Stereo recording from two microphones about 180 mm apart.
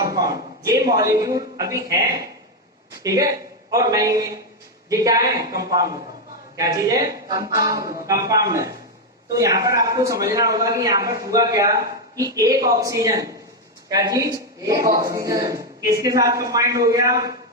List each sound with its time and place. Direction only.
0.0 s a sound: 20° right (ahead or behind)
0.6 s a man's voice: 20° right (ahead or behind)
3.0 s a man's voice: 20° right (ahead or behind)
7.3 s a capella: 20° right (ahead or behind)
7.6 s a man's voice: 20° right (ahead or behind)